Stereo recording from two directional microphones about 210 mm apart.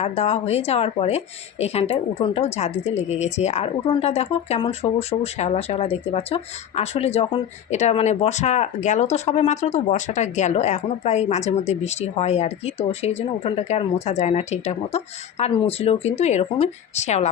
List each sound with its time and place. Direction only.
0.0 s speech: 30° left (ahead or behind)